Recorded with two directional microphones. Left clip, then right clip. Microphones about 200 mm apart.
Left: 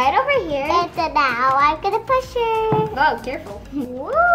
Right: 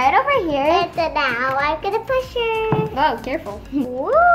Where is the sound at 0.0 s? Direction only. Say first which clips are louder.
Right 1 dB; 30° right (ahead or behind).